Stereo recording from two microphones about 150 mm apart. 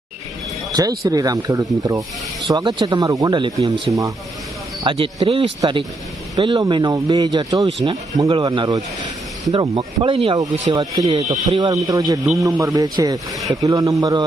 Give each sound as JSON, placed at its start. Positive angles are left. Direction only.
{"t": 0.7, "sound": "speech", "side_deg": -25}
{"t": 10.8, "sound": "speech", "side_deg": -25}